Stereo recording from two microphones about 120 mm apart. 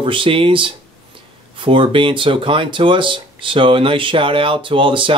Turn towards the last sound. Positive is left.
turn(degrees=-45)  # may be behind; listen again after turning